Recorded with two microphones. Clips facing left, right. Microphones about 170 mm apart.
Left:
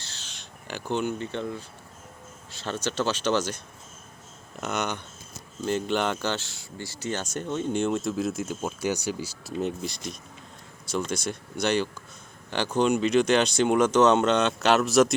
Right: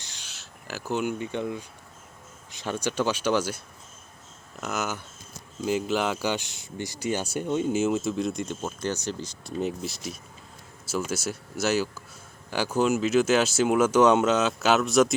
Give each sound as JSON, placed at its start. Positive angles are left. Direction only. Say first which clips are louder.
{"t": 0.0, "sound": "a sound", "louder": "left 2 dB", "side_deg": -15}
{"t": 2.5, "sound": "speech", "louder": "right 1 dB", "side_deg": -15}
{"t": 4.6, "sound": "speech", "louder": "left 1 dB", "side_deg": 0}